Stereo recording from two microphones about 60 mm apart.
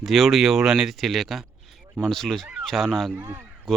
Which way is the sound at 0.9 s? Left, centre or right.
Centre.